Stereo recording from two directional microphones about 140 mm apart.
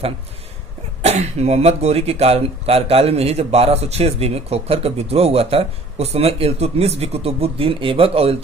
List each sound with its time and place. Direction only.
1.0 s speech: 50° right (ahead or behind)